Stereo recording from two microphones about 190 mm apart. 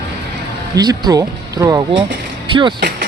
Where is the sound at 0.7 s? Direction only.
20° right (ahead or behind).